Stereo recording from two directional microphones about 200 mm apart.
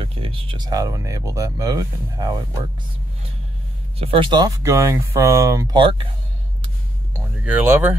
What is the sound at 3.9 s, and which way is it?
Speech, 25° right (ahead or behind).